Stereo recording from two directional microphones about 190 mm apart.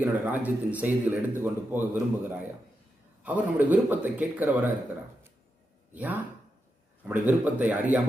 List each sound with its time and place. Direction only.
0.0 s speech: 10° right (ahead or behind)
5.9 s speech: 10° right (ahead or behind)